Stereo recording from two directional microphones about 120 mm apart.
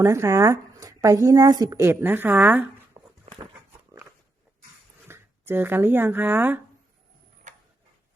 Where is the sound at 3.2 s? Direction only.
45° right (ahead or behind).